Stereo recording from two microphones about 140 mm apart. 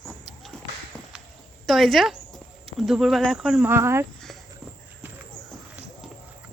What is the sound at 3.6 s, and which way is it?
Speech, 15° right (ahead or behind).